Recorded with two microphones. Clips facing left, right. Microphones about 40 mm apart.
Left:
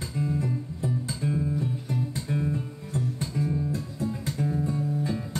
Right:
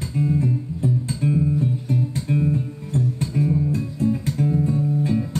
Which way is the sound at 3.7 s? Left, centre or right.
Right.